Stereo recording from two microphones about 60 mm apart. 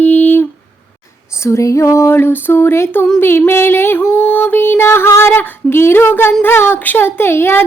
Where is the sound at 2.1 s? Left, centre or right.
Left.